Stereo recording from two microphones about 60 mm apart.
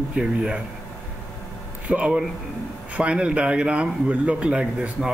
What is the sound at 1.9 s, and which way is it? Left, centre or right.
Speech, right.